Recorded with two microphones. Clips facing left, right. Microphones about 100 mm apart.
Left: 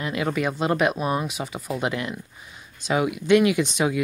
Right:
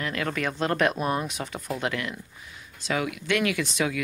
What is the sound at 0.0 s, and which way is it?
Speech, 15° left (ahead or behind).